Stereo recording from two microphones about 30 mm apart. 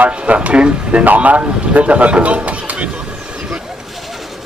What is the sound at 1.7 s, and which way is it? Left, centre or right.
A man's voice, right.